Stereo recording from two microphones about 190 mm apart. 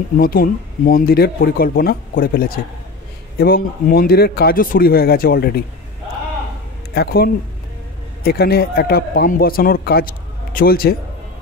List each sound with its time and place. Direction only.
0.2 s a man's voice: 50° left (ahead or behind)
6.9 s a man's voice: 55° left (ahead or behind)